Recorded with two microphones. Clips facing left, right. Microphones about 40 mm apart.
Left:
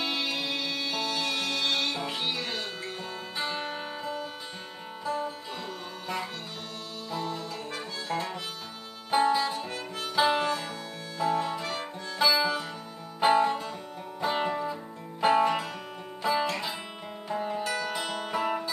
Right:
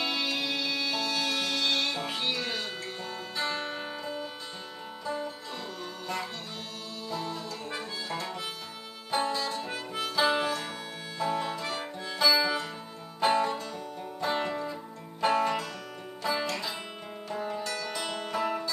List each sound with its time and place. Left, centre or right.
0.0 s music: centre
3.3 s music: centre
7.1 s music: centre
9.1 s music: centre
10.1 s harmonica: centre
11.1 s music: centre